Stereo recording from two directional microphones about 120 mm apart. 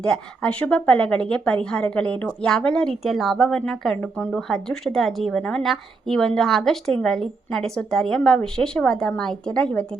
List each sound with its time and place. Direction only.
0.0 s a woman's voice: 10° left (ahead or behind)
3.9 s a woman's voice: 15° left (ahead or behind)
4.3 s a woman's voice: 5° left (ahead or behind)